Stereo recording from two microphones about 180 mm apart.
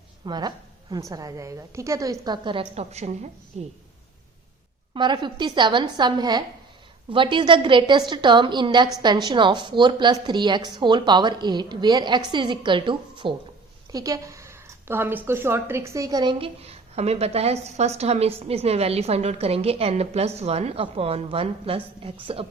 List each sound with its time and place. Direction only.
0.3 s a woman's voice: 25° right (ahead or behind)
4.9 s a woman's voice: 25° right (ahead or behind)